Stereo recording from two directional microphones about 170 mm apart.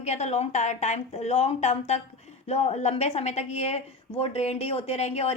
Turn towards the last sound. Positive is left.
turn(degrees=40)  # may be behind; listen again after turning